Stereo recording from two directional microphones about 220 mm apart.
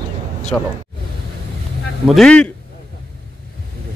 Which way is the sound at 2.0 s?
Centre (ahead or behind).